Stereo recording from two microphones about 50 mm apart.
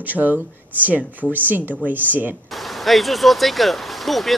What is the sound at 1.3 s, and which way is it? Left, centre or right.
Speech, right.